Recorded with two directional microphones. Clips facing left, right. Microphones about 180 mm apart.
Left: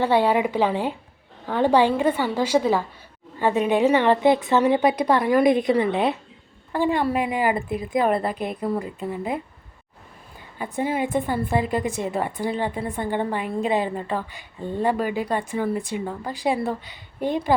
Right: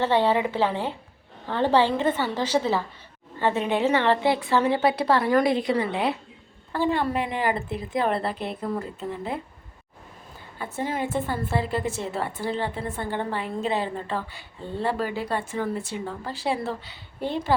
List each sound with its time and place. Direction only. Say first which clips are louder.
0.0 s a woman's voice: left 2 dB; 10° left (ahead or behind)
10.6 s a woman's voice: left 4 dB; 15° left (ahead or behind)